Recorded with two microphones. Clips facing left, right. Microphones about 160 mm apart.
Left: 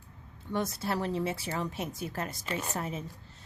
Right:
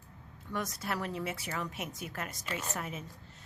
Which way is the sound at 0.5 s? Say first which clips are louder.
Left 5 dB; 30° left (ahead or behind).